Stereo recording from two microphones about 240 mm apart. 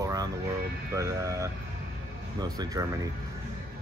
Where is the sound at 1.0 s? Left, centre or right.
Centre.